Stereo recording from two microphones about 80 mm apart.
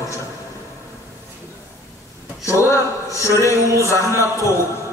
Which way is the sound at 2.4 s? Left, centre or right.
Left.